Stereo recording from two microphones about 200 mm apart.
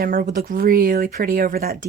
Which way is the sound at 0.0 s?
45° right (ahead or behind).